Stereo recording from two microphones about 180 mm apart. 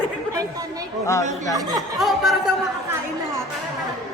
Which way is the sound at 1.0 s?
15° left (ahead or behind).